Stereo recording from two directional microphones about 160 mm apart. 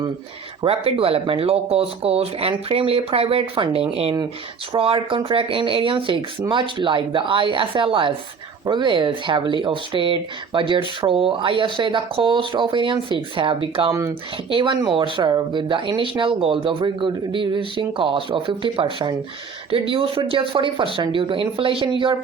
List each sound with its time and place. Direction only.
0.6 s speech: 35° right (ahead or behind)